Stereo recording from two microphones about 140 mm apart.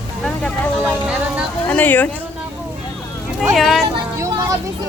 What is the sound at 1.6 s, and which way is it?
Speech, 15° left (ahead or behind).